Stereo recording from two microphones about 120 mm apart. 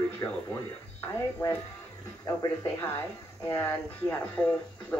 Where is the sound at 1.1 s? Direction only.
20° left (ahead or behind).